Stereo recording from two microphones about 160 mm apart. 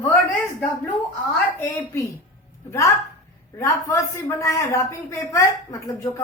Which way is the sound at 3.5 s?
20° left (ahead or behind).